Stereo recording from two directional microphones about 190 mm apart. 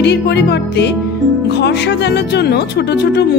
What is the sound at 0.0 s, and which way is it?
Speech, 65° left (ahead or behind).